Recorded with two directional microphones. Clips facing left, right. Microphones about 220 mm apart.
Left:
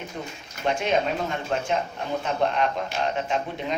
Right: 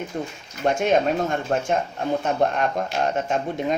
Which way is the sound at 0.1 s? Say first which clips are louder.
Right 5 dB; 50° right (ahead or behind).